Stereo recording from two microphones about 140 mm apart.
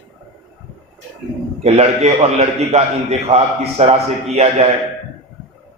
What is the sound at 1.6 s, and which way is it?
A man's voice, 50° right (ahead or behind).